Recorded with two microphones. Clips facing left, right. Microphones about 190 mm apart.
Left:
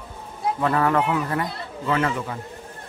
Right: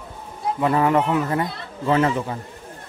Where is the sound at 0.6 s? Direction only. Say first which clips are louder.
Right 3 dB; 15° right (ahead or behind).